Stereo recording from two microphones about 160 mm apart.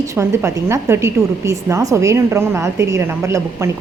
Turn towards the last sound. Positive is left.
turn(degrees=-15)  # may be behind; listen again after turning